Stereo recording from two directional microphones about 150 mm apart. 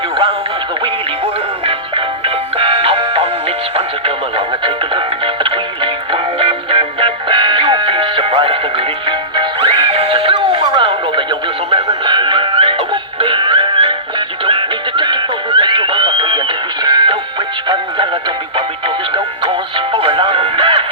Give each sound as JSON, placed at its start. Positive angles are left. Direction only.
{"t": 1.6, "sound": "music", "side_deg": -40}